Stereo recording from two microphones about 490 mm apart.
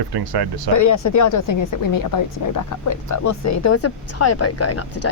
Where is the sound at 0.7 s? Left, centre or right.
Left.